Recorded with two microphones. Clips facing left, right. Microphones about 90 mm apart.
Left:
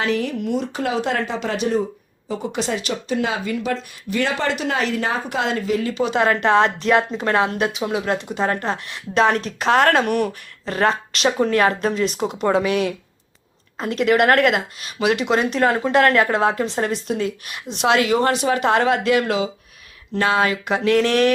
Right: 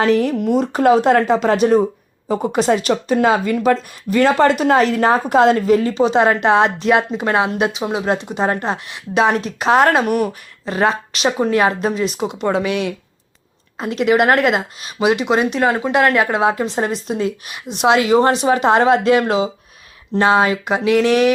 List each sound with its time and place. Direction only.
0.0 s speech: 40° right (ahead or behind); by 12.9 s centre (ahead or behind)
13.7 s speech: 10° right (ahead or behind)